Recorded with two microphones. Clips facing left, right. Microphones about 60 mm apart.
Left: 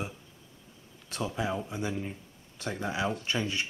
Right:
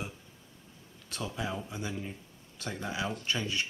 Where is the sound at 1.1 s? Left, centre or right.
Centre.